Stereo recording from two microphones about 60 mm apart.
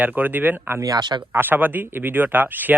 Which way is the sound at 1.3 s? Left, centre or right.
Right.